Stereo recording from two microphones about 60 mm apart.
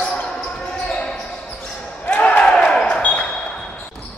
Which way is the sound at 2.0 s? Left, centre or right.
Left.